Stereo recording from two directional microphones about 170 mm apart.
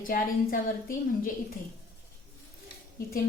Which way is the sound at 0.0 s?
55° left (ahead or behind).